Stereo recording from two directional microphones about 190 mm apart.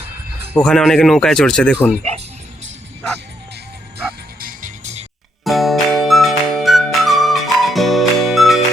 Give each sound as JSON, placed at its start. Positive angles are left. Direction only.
{"t": 0.5, "sound": "speech", "side_deg": 5}
{"t": 4.4, "sound": "music", "side_deg": -45}
{"t": 5.5, "sound": "music", "side_deg": 0}